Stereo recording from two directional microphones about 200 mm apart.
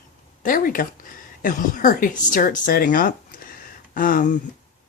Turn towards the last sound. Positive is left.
turn(degrees=40)  # may be behind; listen again after turning